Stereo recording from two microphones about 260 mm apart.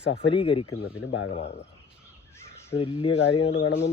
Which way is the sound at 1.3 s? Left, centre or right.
Left.